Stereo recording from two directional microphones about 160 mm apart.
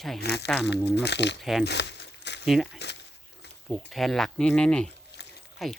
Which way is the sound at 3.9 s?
Centre (ahead or behind).